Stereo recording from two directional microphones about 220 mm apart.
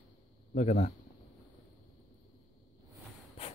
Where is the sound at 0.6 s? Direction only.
35° left (ahead or behind).